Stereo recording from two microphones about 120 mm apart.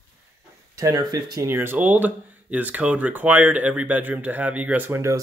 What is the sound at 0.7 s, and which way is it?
Speech, 30° right (ahead or behind).